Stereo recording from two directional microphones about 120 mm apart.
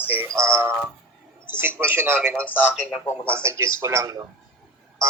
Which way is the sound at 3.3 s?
20° right (ahead or behind).